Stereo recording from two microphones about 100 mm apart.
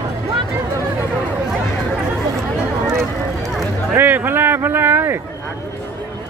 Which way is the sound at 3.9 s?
20° right (ahead or behind).